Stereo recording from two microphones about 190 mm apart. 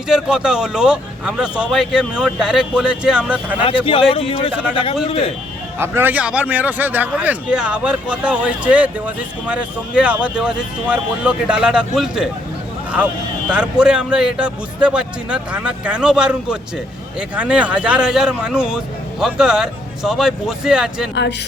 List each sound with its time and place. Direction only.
0.1 s speech: 5° right (ahead or behind)
3.6 s a man's voice: 30° left (ahead or behind)
5.8 s speech: 10° right (ahead or behind)
13.5 s speech: 5° right (ahead or behind)